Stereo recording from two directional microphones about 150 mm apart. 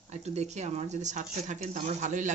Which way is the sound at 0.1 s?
50° right (ahead or behind).